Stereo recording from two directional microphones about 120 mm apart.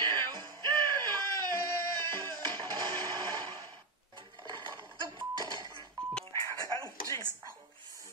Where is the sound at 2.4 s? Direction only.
35° right (ahead or behind).